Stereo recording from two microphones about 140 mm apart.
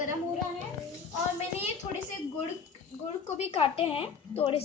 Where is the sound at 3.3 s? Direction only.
45° left (ahead or behind).